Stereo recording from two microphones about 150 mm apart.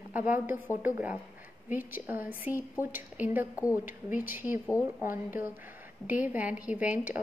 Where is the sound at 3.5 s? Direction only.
20° left (ahead or behind).